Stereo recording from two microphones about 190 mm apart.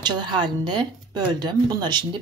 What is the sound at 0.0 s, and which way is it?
Speech, 25° right (ahead or behind).